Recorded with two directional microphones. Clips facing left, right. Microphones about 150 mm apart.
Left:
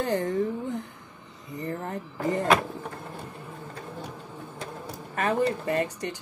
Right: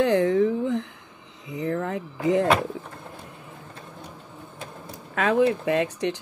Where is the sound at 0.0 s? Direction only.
75° right (ahead or behind); by 2.4 s 90° right.